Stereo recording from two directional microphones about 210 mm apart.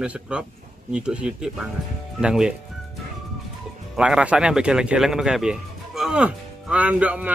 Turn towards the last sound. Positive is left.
turn(degrees=-5)  # may be behind; listen again after turning